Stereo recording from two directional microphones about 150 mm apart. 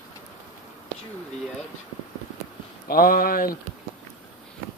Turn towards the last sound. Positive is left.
turn(degrees=80)